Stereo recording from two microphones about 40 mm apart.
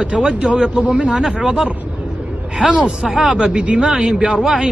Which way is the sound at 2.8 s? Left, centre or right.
Centre.